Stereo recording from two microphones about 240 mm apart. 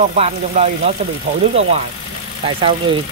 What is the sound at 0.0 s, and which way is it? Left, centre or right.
Speech, right.